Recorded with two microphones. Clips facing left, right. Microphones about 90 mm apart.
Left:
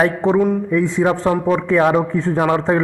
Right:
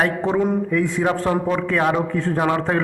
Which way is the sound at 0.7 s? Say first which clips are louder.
Left 3 dB; 20° left (ahead or behind).